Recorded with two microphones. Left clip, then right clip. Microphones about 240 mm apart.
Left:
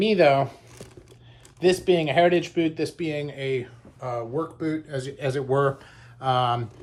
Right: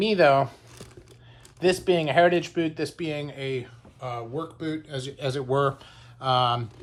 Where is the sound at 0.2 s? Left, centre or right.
Centre.